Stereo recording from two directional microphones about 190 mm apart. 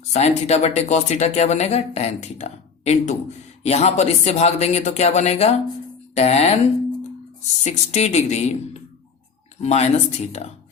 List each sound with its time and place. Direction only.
0.1 s speech: 35° left (ahead or behind)
7.6 s speech: 35° left (ahead or behind)
9.6 s speech: 35° left (ahead or behind)